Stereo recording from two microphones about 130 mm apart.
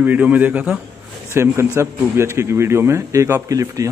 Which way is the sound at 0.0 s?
10° right (ahead or behind).